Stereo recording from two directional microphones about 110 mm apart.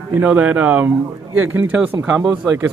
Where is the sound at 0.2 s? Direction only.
10° right (ahead or behind).